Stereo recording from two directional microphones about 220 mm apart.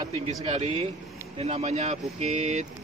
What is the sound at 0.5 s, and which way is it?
Speech, 25° right (ahead or behind).